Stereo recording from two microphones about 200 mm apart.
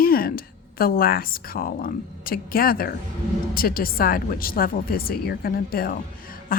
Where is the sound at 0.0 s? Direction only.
45° left (ahead or behind).